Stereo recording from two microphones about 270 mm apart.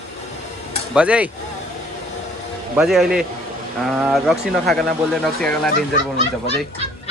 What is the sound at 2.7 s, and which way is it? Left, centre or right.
Speech, centre.